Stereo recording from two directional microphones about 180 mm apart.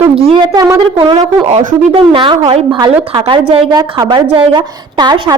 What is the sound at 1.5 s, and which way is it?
A woman's voice, 30° right (ahead or behind).